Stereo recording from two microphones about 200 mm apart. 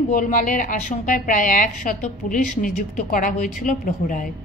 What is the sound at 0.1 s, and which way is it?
A woman's voice, 40° left (ahead or behind).